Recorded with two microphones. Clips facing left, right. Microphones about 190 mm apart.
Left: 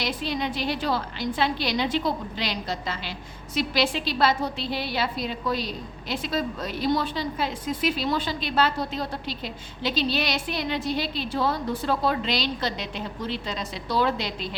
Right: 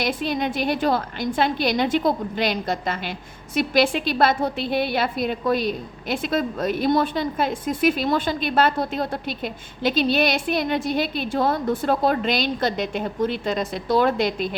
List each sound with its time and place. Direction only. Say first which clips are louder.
0.0 s a woman's voice: right 4 dB; 50° right (ahead or behind)